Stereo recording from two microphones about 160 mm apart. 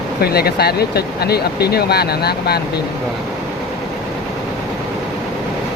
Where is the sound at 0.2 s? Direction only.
80° left.